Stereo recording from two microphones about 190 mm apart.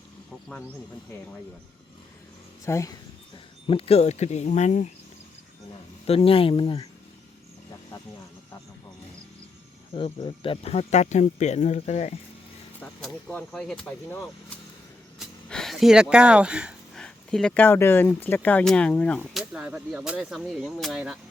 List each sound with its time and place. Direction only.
2.6 s speech: 15° left (ahead or behind)
3.3 s speech: 30° left (ahead or behind)
6.1 s speech: 30° left (ahead or behind)
9.9 s speech: 25° left (ahead or behind)
12.8 s speech: 5° left (ahead or behind)
15.2 s speech: centre (ahead or behind)